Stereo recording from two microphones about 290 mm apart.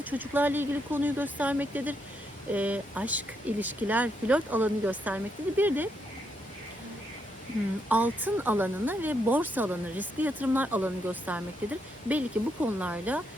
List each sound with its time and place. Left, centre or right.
0.0 s speech: centre
7.9 s speech: centre